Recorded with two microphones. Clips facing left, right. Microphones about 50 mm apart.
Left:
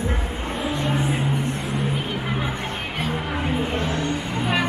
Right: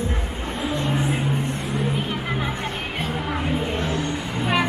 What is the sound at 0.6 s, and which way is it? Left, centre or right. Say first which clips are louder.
Vehicle: even; centre.